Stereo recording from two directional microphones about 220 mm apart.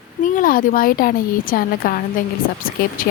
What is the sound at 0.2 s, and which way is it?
A woman's voice, 35° left (ahead or behind).